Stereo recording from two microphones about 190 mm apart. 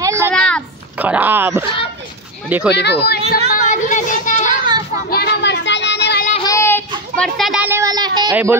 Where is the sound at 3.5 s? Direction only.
40° left (ahead or behind).